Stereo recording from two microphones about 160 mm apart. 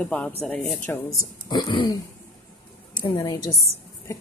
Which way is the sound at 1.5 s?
30° left (ahead or behind).